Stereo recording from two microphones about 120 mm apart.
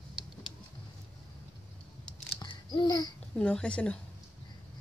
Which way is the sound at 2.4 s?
40° left (ahead or behind).